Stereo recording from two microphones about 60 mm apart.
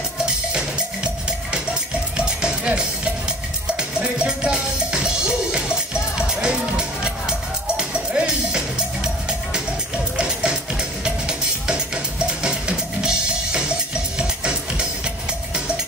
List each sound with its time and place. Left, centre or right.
1.5 s music: centre